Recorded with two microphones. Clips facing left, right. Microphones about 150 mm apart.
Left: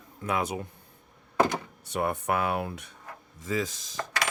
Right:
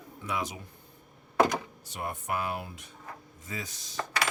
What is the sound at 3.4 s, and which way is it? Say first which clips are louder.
Chopping: left 12 dB; 90° left.